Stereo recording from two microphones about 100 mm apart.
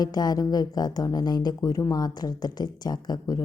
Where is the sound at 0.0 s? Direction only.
40° left (ahead or behind).